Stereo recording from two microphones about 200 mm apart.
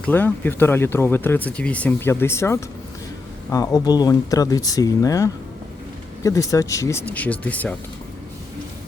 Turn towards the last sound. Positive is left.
turn(degrees=10)  # may be behind; listen again after turning